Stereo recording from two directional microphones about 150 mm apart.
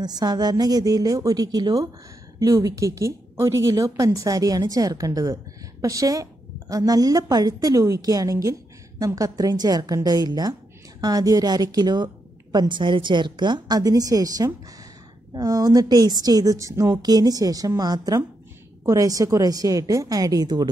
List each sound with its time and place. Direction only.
0.0 s a woman's voice: 25° right (ahead or behind)